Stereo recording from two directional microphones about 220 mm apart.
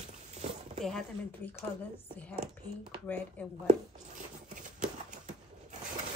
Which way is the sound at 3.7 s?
35° right (ahead or behind).